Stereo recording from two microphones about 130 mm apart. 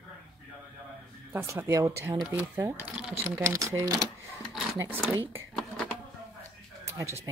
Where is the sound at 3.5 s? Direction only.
25° right (ahead or behind).